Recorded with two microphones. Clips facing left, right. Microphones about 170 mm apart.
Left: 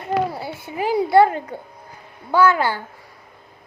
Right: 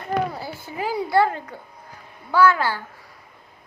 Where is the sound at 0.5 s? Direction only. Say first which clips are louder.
Left 3 dB; 65° left (ahead or behind).